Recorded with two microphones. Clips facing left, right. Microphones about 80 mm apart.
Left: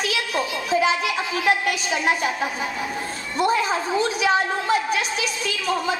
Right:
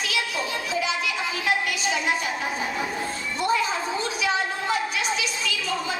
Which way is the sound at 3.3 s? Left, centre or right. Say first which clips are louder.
Left 4 dB; left.